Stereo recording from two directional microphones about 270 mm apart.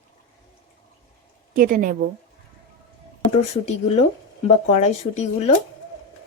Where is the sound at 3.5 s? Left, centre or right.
Left.